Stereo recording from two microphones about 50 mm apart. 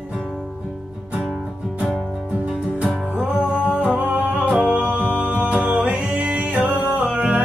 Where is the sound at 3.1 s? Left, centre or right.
Right.